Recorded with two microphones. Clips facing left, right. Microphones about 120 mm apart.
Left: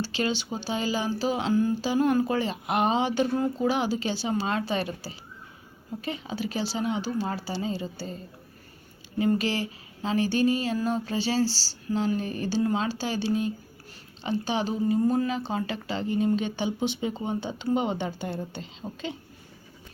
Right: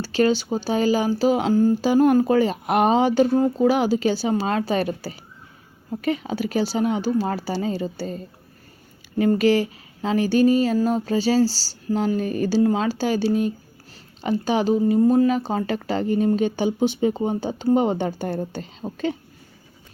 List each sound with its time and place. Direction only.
0.0 s speech: 45° right (ahead or behind)
6.0 s a woman's voice: 30° left (ahead or behind)
6.2 s speech: 50° right (ahead or behind)
9.1 s speech: 50° right (ahead or behind)
10.2 s a sound: 40° right (ahead or behind)
12.4 s speech: 45° right (ahead or behind)